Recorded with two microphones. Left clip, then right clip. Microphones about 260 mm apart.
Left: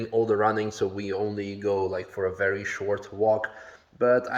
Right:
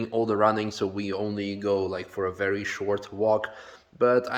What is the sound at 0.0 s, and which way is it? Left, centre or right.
Speech, centre.